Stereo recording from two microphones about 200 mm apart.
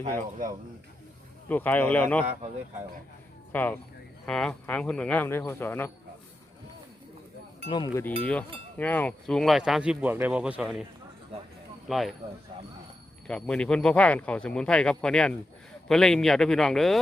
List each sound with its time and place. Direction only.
1.5 s speech: 10° left (ahead or behind)
3.5 s speech: 10° left (ahead or behind)
7.7 s cowbell: 20° left (ahead or behind)
8.0 s speech: 5° left (ahead or behind)
11.9 s speech: centre (ahead or behind)
13.2 s speech: 5° left (ahead or behind)